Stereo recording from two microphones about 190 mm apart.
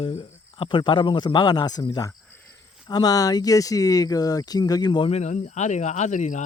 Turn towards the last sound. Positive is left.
turn(degrees=40)  # may be behind; listen again after turning